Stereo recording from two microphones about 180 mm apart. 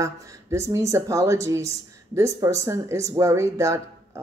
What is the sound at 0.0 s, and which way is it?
Speech, 15° right (ahead or behind).